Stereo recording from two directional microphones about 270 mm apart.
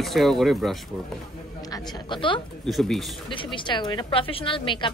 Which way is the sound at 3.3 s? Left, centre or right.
Centre.